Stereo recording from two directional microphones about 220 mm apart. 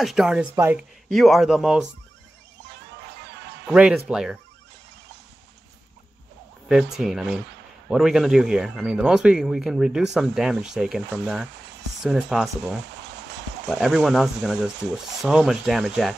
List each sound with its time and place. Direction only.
0.0 s speech: centre (ahead or behind)
3.7 s speech: 5° right (ahead or behind)
6.7 s speech: 5° right (ahead or behind)
13.0 s a sound: 55° right (ahead or behind)
13.7 s speech: centre (ahead or behind)